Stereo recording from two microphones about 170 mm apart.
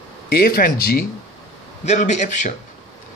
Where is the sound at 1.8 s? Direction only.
45° left (ahead or behind).